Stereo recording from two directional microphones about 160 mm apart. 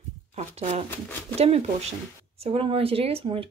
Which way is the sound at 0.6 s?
40° right (ahead or behind).